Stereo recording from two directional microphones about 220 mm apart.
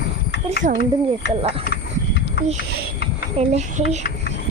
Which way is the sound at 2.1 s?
55° left (ahead or behind).